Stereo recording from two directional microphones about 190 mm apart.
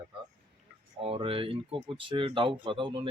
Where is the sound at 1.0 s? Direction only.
30° right (ahead or behind).